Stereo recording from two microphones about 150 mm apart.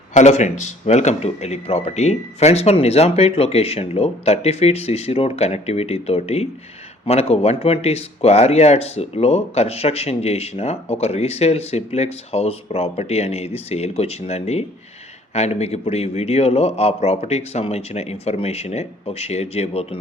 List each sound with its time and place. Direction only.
0.1 s speech: 50° left (ahead or behind)